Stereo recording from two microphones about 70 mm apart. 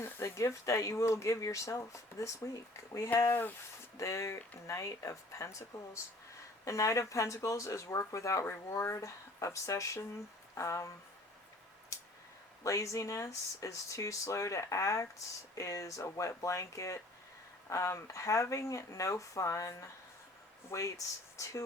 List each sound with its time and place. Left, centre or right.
0.0 s speech: left
11.9 s clicking: left
12.6 s speech: left